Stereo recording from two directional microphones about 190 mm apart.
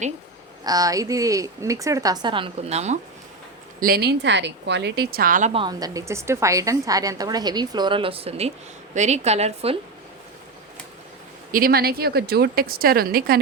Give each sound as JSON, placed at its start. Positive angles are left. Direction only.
{"t": 0.6, "sound": "a woman's voice", "side_deg": -20}
{"t": 3.8, "sound": "a woman's voice", "side_deg": -50}
{"t": 5.5, "sound": "a woman's voice", "side_deg": -20}
{"t": 11.5, "sound": "a woman's voice", "side_deg": -50}